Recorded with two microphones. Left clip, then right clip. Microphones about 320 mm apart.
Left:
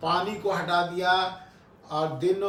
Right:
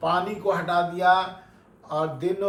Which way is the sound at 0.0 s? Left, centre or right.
Centre.